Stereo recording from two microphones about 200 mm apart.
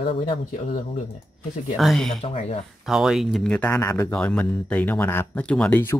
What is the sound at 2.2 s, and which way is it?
Speech, 30° left (ahead or behind).